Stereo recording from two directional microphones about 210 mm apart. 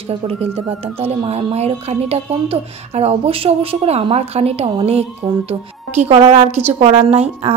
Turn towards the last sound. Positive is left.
turn(degrees=-30)  # may be behind; listen again after turning